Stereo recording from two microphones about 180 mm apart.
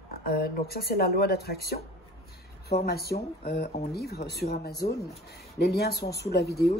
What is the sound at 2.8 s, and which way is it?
Speech, 60° left (ahead or behind).